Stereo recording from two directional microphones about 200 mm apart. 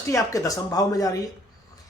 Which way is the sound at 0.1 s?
15° left (ahead or behind).